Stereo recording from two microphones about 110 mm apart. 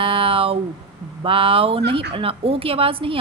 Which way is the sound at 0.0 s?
50° right (ahead or behind).